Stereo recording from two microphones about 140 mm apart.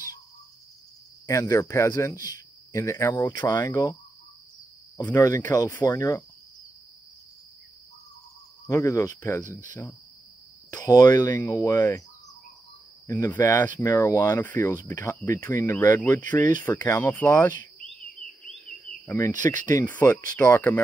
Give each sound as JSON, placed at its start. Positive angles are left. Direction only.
{"t": 1.2, "sound": "speech", "side_deg": 20}
{"t": 5.0, "sound": "speech", "side_deg": 20}
{"t": 8.6, "sound": "speech", "side_deg": 20}
{"t": 10.7, "sound": "speech", "side_deg": 25}
{"t": 11.6, "sound": "speech", "side_deg": 15}
{"t": 13.2, "sound": "speech", "side_deg": 15}
{"t": 18.4, "sound": "cricket", "side_deg": 5}
{"t": 19.0, "sound": "speech", "side_deg": 20}
{"t": 19.3, "sound": "speech", "side_deg": -65}
{"t": 19.6, "sound": "speech", "side_deg": 30}
{"t": 19.9, "sound": "speech", "side_deg": 15}